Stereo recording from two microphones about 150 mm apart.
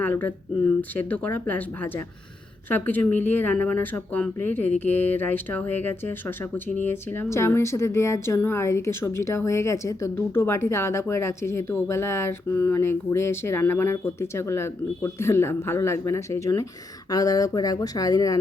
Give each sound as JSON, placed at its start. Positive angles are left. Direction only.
{"t": 0.0, "sound": "speech", "side_deg": 10}